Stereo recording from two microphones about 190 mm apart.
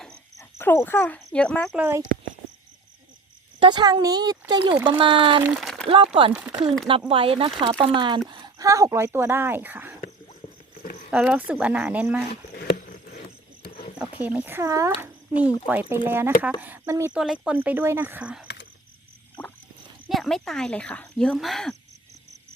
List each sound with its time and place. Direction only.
0.6 s speech: 10° left (ahead or behind)
1.7 s speech: 10° right (ahead or behind)
3.6 s speech: 25° right (ahead or behind)
5.4 s speech: 5° right (ahead or behind)
7.1 s speech: 30° right (ahead or behind); by 9.9 s 10° right (ahead or behind)
10.8 s a sound: 45° left (ahead or behind)
11.1 s speech: 5° right (ahead or behind)
12.3 s a sound: 55° left (ahead or behind)
14.0 s speech: 10° right (ahead or behind)
15.0 s a sound: 10° right (ahead or behind)
15.6 s speech: 10° right (ahead or behind)
17.1 s speech: 5° right (ahead or behind)
20.1 s speech: centre (ahead or behind)